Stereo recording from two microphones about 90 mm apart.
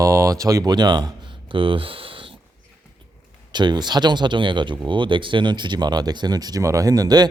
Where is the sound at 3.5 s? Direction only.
55° right (ahead or behind).